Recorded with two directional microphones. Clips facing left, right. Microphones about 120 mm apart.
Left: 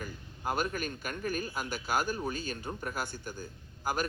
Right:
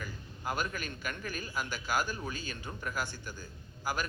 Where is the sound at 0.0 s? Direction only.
45° left (ahead or behind).